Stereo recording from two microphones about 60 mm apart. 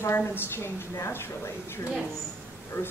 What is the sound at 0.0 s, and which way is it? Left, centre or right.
A woman's voice, left.